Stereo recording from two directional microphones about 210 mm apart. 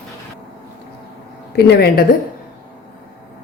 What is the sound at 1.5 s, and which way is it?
Speech, 50° left (ahead or behind).